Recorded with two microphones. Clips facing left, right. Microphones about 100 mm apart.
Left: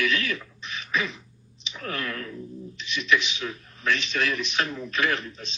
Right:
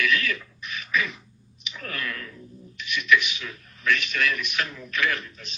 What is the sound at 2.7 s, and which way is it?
A man's voice, 30° left (ahead or behind).